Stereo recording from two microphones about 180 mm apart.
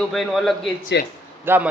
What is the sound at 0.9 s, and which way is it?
Speech, 75° left (ahead or behind).